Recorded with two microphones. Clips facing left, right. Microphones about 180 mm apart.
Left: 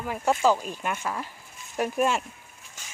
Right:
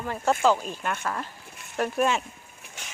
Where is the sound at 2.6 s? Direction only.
65° right (ahead or behind).